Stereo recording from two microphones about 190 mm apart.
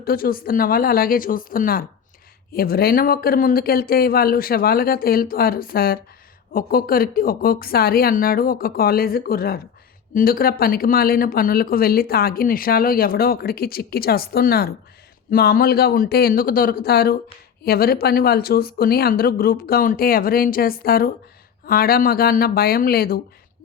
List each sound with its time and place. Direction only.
0.0 s speech: 50° left (ahead or behind)